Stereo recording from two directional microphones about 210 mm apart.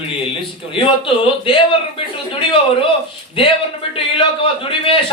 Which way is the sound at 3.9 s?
25° left (ahead or behind).